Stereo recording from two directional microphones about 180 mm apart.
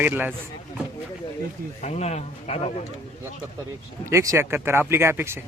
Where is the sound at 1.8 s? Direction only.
40° left (ahead or behind).